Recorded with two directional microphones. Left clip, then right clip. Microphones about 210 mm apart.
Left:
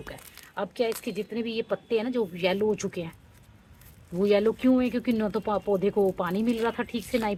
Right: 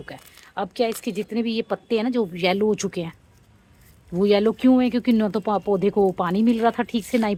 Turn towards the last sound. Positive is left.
turn(degrees=-45)  # may be behind; listen again after turning